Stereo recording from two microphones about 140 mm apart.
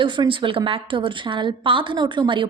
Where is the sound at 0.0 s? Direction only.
35° right (ahead or behind).